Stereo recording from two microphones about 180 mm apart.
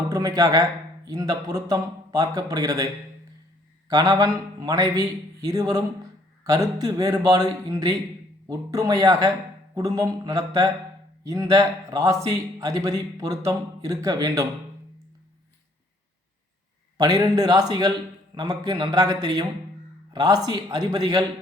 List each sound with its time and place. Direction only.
0.1 s a man's voice: 20° right (ahead or behind)
17.0 s speech: 20° right (ahead or behind)